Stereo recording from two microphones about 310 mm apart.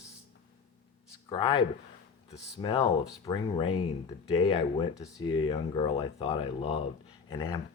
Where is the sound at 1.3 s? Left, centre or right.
Centre.